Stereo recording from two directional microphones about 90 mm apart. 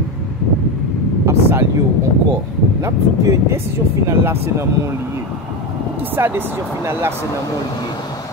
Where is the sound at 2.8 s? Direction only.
35° right (ahead or behind).